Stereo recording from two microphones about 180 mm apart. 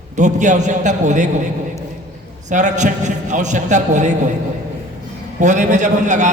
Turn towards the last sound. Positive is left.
turn(degrees=-40)  # may be behind; listen again after turning